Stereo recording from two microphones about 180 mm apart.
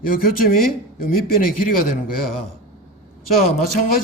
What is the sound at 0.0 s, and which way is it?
Speech, 50° left (ahead or behind).